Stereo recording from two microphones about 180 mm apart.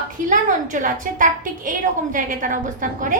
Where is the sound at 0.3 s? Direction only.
45° right (ahead or behind).